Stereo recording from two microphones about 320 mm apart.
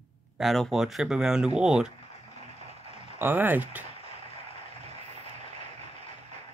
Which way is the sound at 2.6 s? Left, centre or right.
Centre.